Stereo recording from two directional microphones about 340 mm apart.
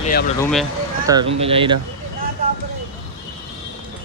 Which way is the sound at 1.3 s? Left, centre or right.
Centre.